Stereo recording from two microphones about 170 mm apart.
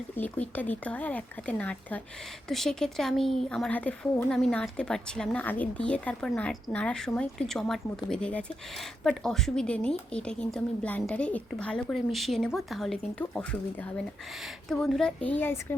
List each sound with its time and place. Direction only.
0.2 s speech: 10° left (ahead or behind)